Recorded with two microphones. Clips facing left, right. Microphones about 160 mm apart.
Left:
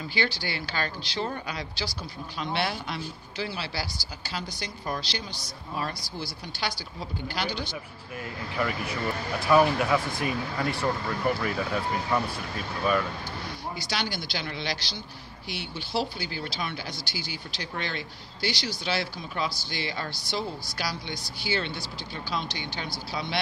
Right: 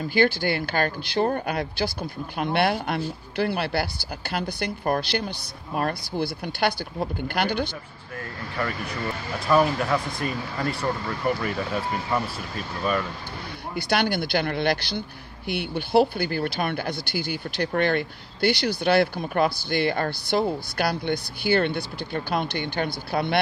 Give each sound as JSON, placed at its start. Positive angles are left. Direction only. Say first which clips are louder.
{"t": 0.0, "sound": "speech", "louder": "right 9 dB", "side_deg": -50}
{"t": 8.5, "sound": "speech", "louder": "even", "side_deg": 5}
{"t": 13.7, "sound": "speech", "louder": "right 11 dB", "side_deg": -60}